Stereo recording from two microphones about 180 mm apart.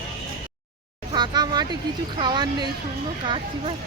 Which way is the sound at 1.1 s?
25° right (ahead or behind).